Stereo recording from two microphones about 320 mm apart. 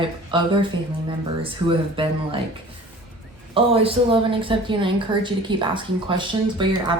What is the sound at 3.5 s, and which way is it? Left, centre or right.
A woman's voice, centre.